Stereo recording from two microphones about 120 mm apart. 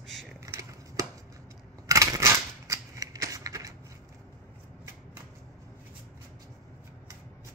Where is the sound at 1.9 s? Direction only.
25° right (ahead or behind).